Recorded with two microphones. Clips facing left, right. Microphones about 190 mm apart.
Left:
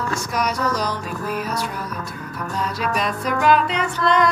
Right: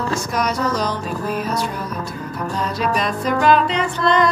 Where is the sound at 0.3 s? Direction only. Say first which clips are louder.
Even; 10° left (ahead or behind).